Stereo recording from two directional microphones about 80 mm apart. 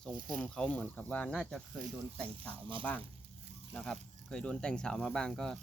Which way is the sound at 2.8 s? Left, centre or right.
Left.